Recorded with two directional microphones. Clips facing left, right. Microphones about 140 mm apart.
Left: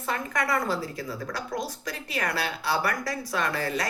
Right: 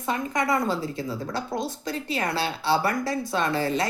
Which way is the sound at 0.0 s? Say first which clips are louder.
Right 3 dB; 20° right (ahead or behind).